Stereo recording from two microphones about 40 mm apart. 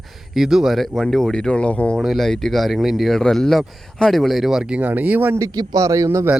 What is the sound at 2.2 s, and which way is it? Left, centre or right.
Speech, centre.